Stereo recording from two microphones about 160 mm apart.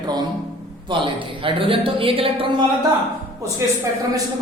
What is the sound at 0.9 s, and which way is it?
A man's voice, 30° right (ahead or behind).